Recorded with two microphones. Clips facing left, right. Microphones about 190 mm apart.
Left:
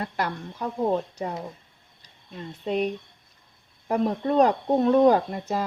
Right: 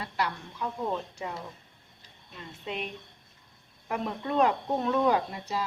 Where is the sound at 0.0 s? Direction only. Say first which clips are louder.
Left 4 dB; 50° left (ahead or behind).